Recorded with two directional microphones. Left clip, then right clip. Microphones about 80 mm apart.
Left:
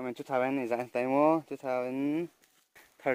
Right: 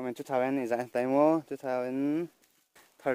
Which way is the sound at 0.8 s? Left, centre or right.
Right.